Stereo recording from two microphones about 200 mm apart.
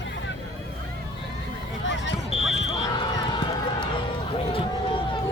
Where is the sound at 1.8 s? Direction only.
65° left (ahead or behind).